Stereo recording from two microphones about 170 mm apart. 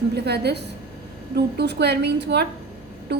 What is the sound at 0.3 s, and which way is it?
A woman's voice, 75° right (ahead or behind).